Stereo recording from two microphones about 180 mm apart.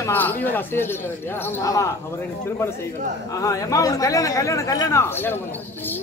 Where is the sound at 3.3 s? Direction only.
20° left (ahead or behind).